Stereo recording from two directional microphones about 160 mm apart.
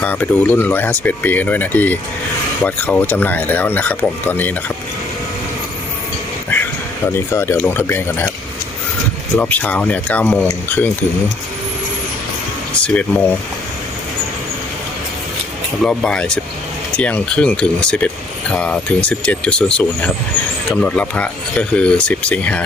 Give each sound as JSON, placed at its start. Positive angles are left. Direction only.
{"t": 0.0, "sound": "speech", "side_deg": 10}
{"t": 7.3, "sound": "speech", "side_deg": 15}
{"t": 9.4, "sound": "speech", "side_deg": 10}
{"t": 12.8, "sound": "speech", "side_deg": 10}
{"t": 15.8, "sound": "speech", "side_deg": 5}